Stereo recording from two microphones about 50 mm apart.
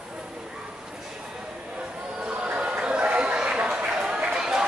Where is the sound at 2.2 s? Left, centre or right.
Right.